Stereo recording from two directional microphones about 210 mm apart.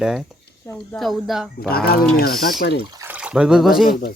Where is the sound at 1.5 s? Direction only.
45° left (ahead or behind).